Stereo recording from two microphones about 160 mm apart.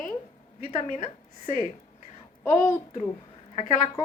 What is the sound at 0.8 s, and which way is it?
Speech, 45° left (ahead or behind).